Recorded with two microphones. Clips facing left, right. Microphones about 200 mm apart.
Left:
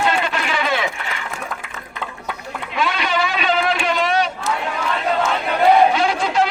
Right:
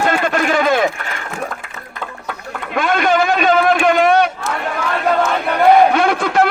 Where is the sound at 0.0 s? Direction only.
50° right (ahead or behind).